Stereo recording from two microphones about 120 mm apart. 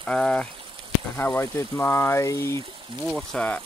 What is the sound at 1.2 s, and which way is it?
Speech, 20° left (ahead or behind).